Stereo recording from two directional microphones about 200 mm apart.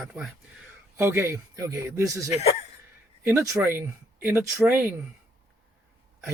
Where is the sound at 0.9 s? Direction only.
15° right (ahead or behind).